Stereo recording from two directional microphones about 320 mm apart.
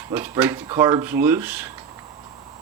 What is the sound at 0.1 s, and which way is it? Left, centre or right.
Speech, centre.